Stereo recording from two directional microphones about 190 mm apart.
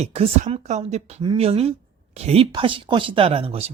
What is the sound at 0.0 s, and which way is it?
Speech, 35° right (ahead or behind).